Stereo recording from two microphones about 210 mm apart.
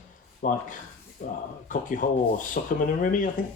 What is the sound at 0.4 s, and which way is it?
Speech, 40° left (ahead or behind).